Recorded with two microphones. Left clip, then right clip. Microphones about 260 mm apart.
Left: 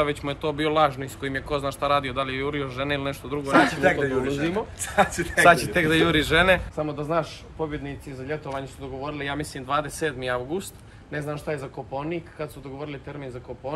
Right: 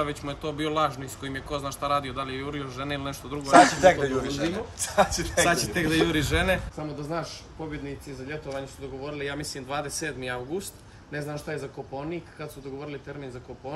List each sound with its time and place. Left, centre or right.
0.0 s speech: centre
3.8 s speech: right
5.4 s speech: centre